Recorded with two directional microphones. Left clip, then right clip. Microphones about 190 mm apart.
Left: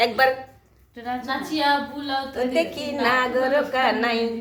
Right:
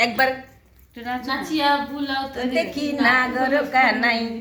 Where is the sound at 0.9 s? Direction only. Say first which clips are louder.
Right 1 dB; 15° left (ahead or behind).